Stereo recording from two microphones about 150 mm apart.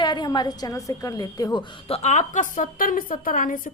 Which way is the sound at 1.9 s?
45° left (ahead or behind).